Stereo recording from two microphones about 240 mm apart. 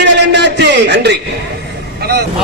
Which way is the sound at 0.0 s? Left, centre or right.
Right.